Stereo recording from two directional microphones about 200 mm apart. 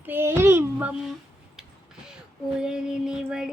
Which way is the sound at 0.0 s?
10° right (ahead or behind).